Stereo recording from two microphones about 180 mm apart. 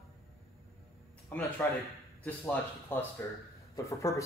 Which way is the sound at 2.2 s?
15° left (ahead or behind).